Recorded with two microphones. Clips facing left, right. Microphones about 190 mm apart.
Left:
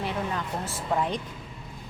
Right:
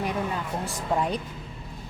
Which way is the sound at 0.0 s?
15° right (ahead or behind).